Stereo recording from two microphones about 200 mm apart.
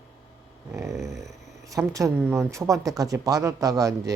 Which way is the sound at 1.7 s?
15° right (ahead or behind).